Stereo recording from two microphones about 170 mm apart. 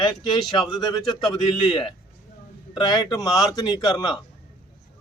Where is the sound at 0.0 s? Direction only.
25° left (ahead or behind).